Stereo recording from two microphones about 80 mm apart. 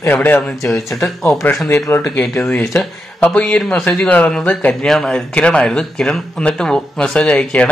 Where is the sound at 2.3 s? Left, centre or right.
Centre.